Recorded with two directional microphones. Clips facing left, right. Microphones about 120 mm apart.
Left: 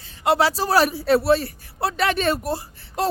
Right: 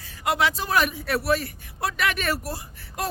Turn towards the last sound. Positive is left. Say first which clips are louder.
# left 7 dB
turn(degrees=30)  # may be behind; listen again after turning